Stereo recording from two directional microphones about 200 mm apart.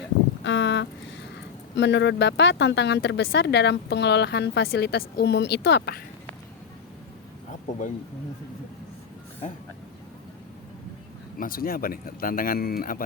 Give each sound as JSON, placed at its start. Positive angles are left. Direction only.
{"t": 0.4, "sound": "speech", "side_deg": 60}
{"t": 11.3, "sound": "speech", "side_deg": 45}